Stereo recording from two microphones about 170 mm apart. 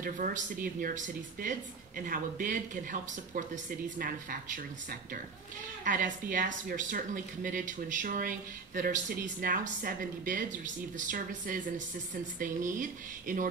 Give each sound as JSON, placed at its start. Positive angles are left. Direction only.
{"t": 0.0, "sound": "speech", "side_deg": -55}
{"t": 5.9, "sound": "speech", "side_deg": -50}